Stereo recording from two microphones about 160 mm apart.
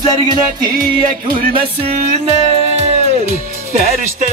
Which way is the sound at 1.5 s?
35° right (ahead or behind).